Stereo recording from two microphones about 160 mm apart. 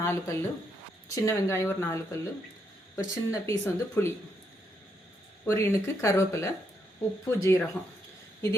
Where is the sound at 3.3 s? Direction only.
20° left (ahead or behind).